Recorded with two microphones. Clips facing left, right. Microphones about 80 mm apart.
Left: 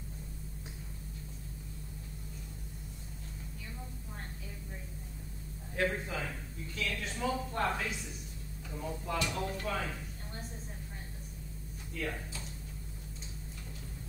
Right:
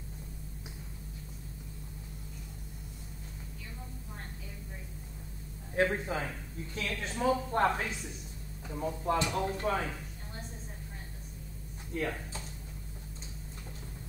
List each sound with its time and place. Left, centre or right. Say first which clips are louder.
5.8 s a woman's voice: right 4 dB; right
11.9 s speech: right 4 dB; right